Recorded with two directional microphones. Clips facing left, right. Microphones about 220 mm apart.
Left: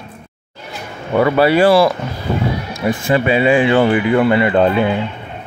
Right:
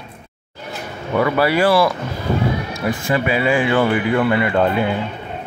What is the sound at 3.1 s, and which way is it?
Speech, 25° left (ahead or behind).